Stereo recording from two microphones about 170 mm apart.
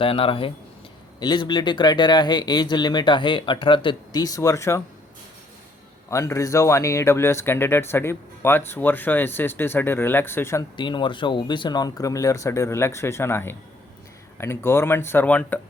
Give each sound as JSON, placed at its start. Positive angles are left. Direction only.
{"t": 0.0, "sound": "speech", "side_deg": 30}
{"t": 6.1, "sound": "speech", "side_deg": 15}
{"t": 10.8, "sound": "speech", "side_deg": 30}